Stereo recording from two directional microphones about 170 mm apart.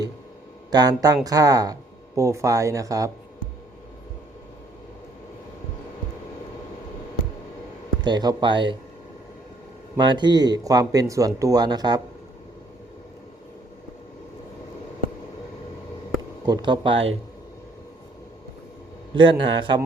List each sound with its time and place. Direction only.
0.7 s speech: 20° right (ahead or behind)
8.0 s speech: 25° right (ahead or behind)
10.0 s speech: 25° right (ahead or behind)
16.5 s speech: 25° right (ahead or behind)
19.1 s speech: 30° right (ahead or behind)